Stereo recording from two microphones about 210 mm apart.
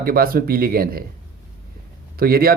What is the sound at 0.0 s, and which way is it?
Speech, 45° right (ahead or behind).